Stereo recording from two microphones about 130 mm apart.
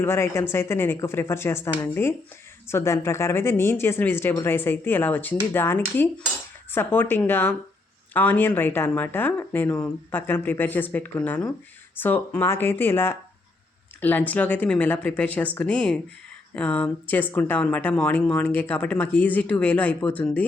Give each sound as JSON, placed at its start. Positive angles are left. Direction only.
{"t": 0.0, "sound": "speech", "side_deg": 20}